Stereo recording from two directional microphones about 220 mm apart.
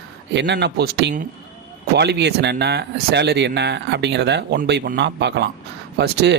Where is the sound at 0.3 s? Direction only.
50° right (ahead or behind).